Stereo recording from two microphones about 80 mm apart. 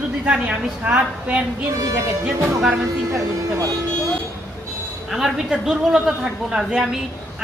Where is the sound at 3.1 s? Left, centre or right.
Right.